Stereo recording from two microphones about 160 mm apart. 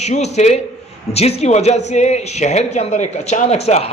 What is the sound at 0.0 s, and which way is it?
Speech, 45° left (ahead or behind).